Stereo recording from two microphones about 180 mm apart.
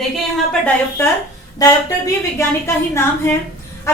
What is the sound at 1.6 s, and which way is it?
A woman's voice, 15° left (ahead or behind).